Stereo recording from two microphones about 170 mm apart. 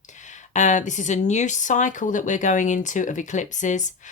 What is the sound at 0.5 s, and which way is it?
Speech, 45° left (ahead or behind).